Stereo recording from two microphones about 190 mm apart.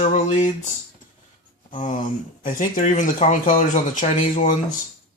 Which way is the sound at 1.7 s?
40° left (ahead or behind).